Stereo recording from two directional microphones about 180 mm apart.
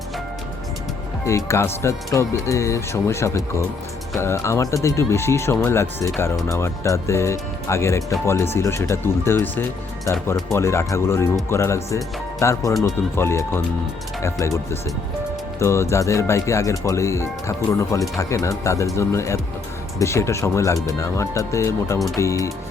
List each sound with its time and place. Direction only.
1.2 s speech: 15° left (ahead or behind)
15.5 s speech: 15° left (ahead or behind)